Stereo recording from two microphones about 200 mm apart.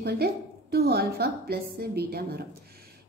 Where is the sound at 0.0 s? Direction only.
50° right (ahead or behind).